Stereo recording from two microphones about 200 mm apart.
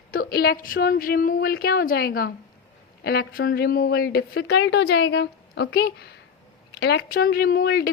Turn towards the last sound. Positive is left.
turn(degrees=50)  # may be behind; listen again after turning